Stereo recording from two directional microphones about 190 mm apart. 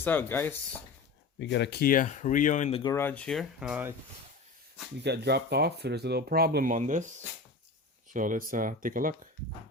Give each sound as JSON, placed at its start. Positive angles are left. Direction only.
{"t": 0.0, "sound": "speech", "side_deg": 10}
{"t": 1.4, "sound": "speech", "side_deg": 65}
{"t": 2.8, "sound": "speech", "side_deg": 15}
{"t": 5.0, "sound": "speech", "side_deg": -60}
{"t": 8.1, "sound": "speech", "side_deg": -45}